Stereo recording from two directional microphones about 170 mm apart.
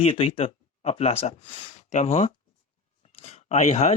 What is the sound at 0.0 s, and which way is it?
Speech, 35° left (ahead or behind).